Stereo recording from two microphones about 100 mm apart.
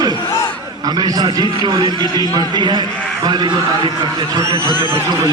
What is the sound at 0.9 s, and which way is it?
A man's voice, 40° right (ahead or behind).